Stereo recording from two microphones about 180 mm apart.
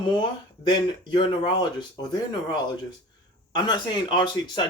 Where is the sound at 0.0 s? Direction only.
25° left (ahead or behind).